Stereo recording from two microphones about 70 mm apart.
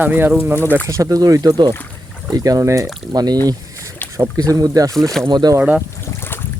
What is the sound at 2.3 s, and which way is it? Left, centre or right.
Speech, right.